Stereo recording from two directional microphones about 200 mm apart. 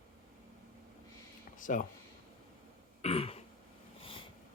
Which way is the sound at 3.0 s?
30° left (ahead or behind).